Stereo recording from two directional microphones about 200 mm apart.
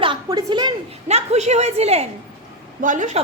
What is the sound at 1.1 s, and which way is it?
A woman's voice, 35° right (ahead or behind).